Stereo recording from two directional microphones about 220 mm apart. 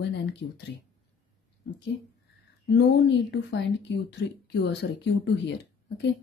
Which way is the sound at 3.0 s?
50° left (ahead or behind).